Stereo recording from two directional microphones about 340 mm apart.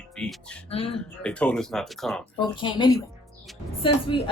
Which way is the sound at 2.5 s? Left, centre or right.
Centre.